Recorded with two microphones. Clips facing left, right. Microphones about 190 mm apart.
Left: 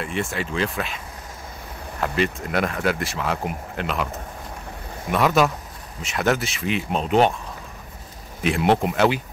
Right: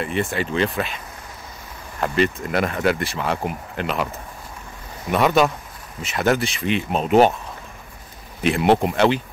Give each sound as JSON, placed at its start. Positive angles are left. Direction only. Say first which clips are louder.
{"t": 0.0, "sound": "speech", "louder": "right 3 dB", "side_deg": 0}
{"t": 5.1, "sound": "speech", "louder": "right 2 dB", "side_deg": 0}
{"t": 8.4, "sound": "speech", "louder": "right 2 dB", "side_deg": 0}